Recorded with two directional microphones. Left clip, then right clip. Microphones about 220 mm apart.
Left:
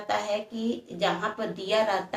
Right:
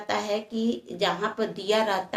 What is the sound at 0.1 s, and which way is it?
Speech, 45° right (ahead or behind).